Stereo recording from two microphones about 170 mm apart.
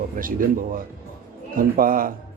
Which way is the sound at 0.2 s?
55° right (ahead or behind).